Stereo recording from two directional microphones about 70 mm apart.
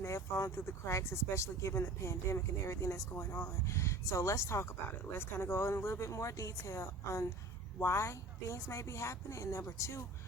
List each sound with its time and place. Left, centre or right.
0.0 s speech: left
5.1 s speech: left